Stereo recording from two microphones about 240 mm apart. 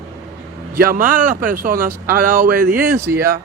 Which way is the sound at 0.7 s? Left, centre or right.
Right.